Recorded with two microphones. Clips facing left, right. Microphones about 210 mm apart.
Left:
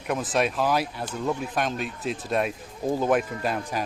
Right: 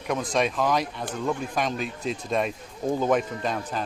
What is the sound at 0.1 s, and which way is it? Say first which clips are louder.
Speech: even; 5° left (ahead or behind).